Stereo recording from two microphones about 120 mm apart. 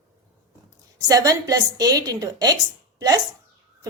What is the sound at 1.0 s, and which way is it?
A woman's voice, 30° right (ahead or behind).